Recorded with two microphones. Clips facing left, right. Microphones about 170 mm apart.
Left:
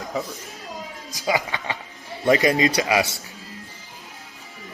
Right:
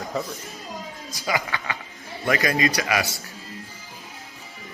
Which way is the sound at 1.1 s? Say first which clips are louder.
Left 3 dB; 20° left (ahead or behind).